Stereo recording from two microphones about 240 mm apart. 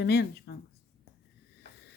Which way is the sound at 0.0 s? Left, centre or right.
Left.